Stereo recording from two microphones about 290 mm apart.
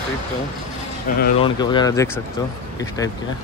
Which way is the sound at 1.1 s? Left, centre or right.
Left.